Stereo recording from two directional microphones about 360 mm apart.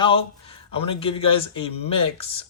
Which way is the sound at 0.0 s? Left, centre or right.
Centre.